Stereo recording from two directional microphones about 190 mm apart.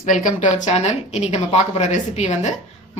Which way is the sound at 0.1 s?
40° left (ahead or behind).